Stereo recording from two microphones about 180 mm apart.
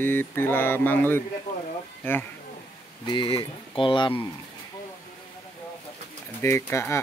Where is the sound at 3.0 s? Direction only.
25° left (ahead or behind).